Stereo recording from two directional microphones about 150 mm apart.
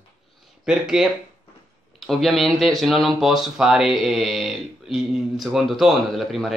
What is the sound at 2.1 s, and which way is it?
Speech, centre (ahead or behind).